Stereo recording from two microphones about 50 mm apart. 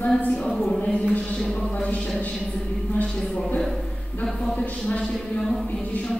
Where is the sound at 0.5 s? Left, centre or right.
Centre.